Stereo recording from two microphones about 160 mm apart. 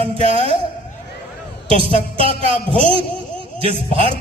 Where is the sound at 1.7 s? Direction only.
35° right (ahead or behind).